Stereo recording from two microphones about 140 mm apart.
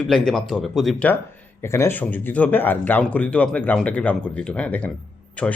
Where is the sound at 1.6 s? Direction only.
20° left (ahead or behind).